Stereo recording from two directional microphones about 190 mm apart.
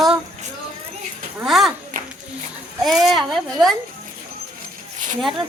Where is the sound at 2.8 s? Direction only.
Centre (ahead or behind).